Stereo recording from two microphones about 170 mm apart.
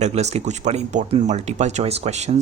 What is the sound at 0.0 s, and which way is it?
Speech, 40° right (ahead or behind).